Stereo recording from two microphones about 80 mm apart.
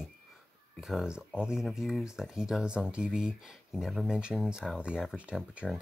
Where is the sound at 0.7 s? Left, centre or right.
Centre.